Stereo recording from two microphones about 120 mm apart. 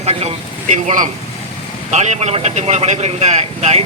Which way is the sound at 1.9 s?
75° right (ahead or behind).